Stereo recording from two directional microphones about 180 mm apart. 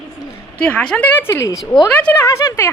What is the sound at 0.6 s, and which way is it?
A woman's voice, 5° left (ahead or behind).